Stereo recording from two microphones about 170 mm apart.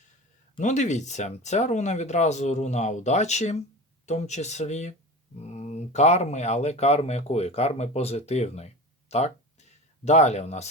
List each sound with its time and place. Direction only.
0.6 s speech: 45° left (ahead or behind)